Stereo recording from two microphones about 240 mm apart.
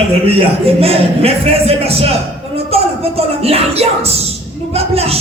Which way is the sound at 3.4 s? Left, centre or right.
Right.